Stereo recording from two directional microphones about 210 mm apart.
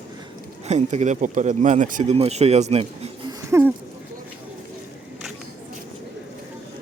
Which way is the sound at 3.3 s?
15° right (ahead or behind).